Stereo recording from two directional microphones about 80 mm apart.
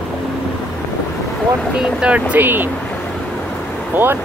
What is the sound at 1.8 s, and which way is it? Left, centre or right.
Speech, centre.